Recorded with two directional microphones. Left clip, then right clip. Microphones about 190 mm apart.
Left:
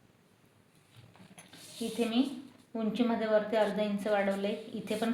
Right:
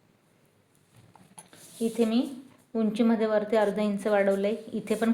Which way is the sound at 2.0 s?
60° right (ahead or behind).